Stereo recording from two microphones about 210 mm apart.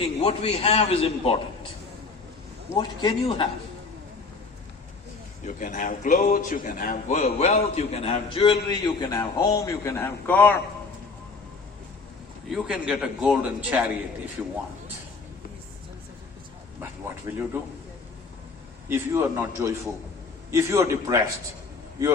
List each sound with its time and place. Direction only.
0.2 s a man's voice: 30° left (ahead or behind)
2.7 s a man's voice: 20° left (ahead or behind)
5.5 s a man's voice: 35° left (ahead or behind); by 10.5 s 10° left (ahead or behind)
12.5 s a man's voice: centre (ahead or behind)
17.3 s a man's voice: 10° right (ahead or behind)
18.9 s a man's voice: 10° right (ahead or behind)